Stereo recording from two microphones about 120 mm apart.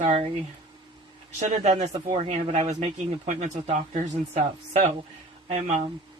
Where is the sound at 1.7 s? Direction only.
65° right (ahead or behind).